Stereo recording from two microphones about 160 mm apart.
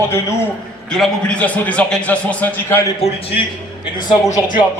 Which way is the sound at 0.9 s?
5° left (ahead or behind).